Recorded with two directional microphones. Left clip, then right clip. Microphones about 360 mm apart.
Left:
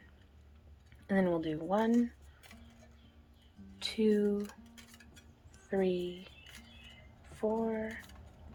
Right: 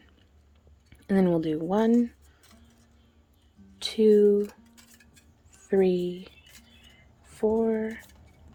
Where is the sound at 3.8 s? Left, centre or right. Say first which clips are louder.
Right 11 dB; right.